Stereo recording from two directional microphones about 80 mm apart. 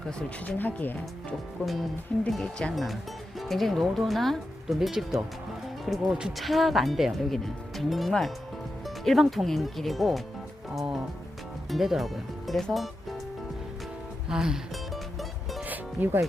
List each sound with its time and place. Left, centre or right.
0.4 s speech: left
1.6 s speech: centre
2.4 s speech: centre
2.7 s speech: centre
14.3 s music: centre
15.6 s music: right